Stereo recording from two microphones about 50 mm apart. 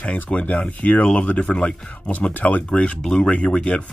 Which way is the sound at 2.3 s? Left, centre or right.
Left.